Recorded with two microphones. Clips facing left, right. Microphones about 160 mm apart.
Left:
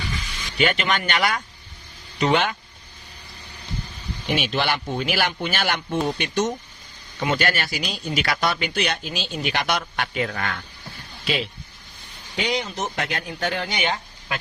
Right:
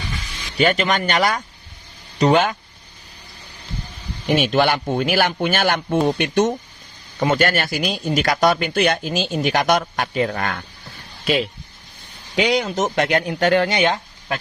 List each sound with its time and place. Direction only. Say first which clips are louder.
0.5 s speech: right 4 dB; 40° right (ahead or behind)
4.4 s speech: right 7 dB; 50° right (ahead or behind)
12.4 s speech: right 7 dB; 90° right